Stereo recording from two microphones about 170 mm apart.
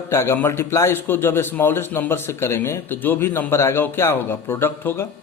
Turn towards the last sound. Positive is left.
turn(degrees=15)  # may be behind; listen again after turning